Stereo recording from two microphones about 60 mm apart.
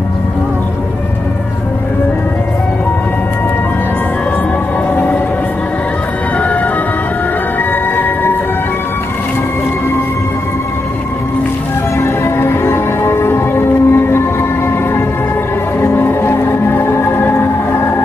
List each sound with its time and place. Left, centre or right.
7.9 s music: left
12.0 s music: left
15.8 s music: left